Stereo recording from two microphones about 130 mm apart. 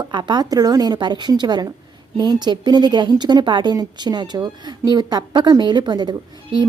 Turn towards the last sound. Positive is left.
turn(degrees=-35)  # may be behind; listen again after turning